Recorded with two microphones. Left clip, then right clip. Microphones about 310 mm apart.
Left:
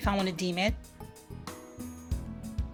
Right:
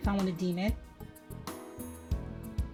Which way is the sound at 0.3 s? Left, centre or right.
Left.